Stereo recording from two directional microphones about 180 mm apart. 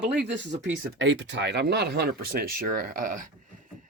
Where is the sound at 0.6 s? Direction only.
90° right.